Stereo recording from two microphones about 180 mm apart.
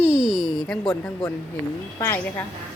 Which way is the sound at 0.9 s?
20° left (ahead or behind).